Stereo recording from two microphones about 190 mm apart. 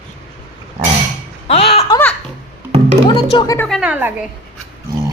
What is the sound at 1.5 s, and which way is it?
Speech, 30° left (ahead or behind).